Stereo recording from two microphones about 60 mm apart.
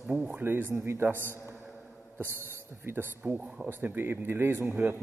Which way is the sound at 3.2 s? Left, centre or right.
Right.